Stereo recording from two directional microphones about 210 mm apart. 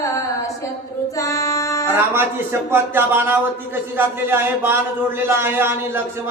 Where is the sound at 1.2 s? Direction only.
15° left (ahead or behind).